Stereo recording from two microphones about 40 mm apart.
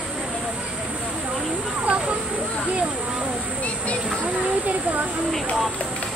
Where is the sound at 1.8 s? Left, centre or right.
Right.